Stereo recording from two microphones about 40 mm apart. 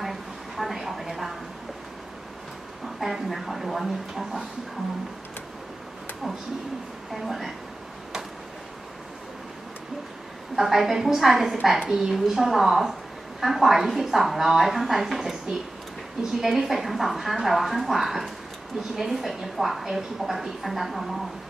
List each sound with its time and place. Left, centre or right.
0.0 s a sound: centre
3.0 s speech: centre
7.1 s speech: centre
10.5 s a woman's voice: centre
11.8 s a woman's voice: centre
16.3 s speech: centre